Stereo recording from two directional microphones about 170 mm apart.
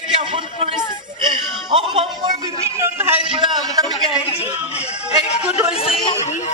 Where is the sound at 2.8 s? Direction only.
10° right (ahead or behind).